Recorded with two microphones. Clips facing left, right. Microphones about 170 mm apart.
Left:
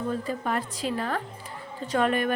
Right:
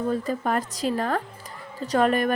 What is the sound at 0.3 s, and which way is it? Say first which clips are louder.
A woman's voice: right 3 dB; 45° right (ahead or behind).